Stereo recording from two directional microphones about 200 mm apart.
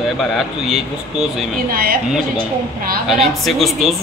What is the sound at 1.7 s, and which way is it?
Speech, 45° right (ahead or behind).